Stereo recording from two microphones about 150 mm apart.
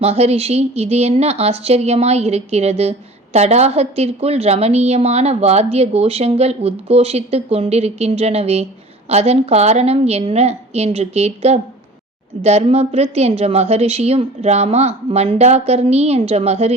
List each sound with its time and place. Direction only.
0.0 s a woman's voice: 45° right (ahead or behind)